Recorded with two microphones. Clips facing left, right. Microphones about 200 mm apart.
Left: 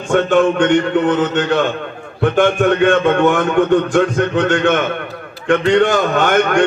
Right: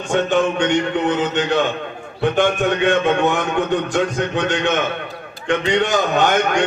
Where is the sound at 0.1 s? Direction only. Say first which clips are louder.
Left 5 dB; 55° left (ahead or behind).